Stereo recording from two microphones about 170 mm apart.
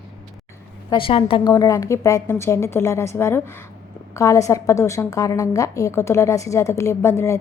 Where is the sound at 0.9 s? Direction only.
30° left (ahead or behind).